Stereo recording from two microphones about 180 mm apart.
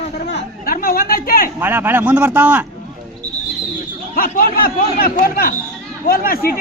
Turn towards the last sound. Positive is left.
turn(degrees=55)  # may be behind; listen again after turning